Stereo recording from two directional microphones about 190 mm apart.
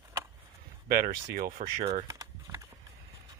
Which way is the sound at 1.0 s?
45° right (ahead or behind).